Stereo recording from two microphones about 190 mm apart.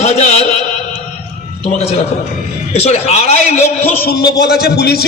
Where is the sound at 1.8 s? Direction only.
30° left (ahead or behind).